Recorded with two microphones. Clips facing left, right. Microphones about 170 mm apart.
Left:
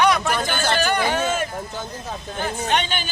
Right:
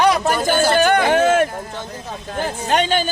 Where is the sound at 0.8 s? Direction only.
55° right (ahead or behind).